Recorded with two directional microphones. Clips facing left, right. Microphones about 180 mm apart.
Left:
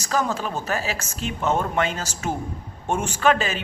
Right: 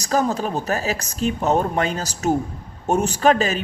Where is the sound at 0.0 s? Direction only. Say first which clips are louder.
Right 4 dB; 40° right (ahead or behind).